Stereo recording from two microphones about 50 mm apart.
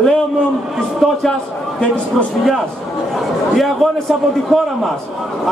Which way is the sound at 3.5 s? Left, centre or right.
Centre.